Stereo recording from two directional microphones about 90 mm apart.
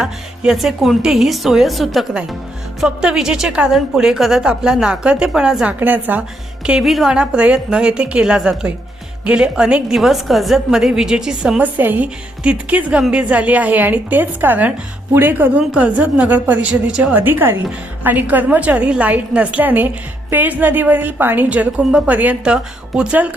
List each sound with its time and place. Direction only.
0.0 s a woman's voice: 5° right (ahead or behind)
6.7 s a woman's voice: 5° right (ahead or behind)